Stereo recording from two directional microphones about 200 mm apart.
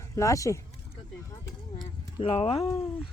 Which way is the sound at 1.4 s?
20° left (ahead or behind).